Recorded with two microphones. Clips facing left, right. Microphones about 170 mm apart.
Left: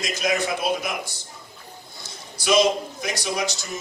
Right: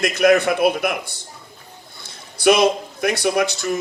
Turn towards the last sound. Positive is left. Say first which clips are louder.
# right 8 dB
turn(degrees=-60)  # may be behind; listen again after turning